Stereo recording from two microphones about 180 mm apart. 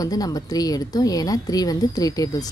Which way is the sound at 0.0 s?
20° left (ahead or behind).